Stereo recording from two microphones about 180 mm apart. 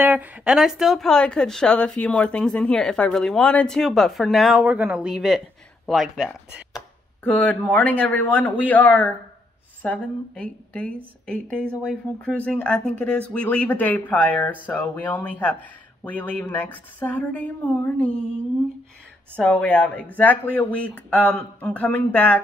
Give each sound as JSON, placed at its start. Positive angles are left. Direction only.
{"t": 0.0, "sound": "speech", "side_deg": -10}
{"t": 19.3, "sound": "speech", "side_deg": 5}